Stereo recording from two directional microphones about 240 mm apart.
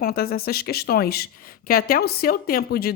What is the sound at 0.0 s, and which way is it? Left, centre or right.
Speech, left.